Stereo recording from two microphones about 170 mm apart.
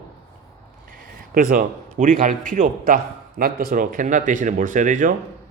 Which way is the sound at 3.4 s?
60° right (ahead or behind).